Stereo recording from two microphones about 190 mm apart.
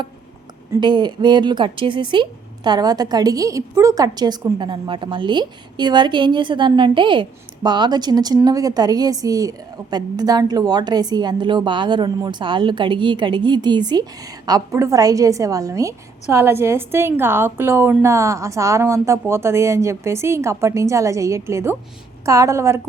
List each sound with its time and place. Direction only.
0.7 s a woman's voice: 25° right (ahead or behind)